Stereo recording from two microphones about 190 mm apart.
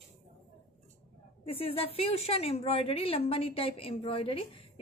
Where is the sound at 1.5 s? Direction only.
30° left (ahead or behind).